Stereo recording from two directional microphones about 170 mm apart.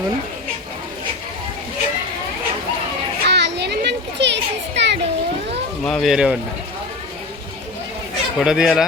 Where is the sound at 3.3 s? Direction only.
80° right.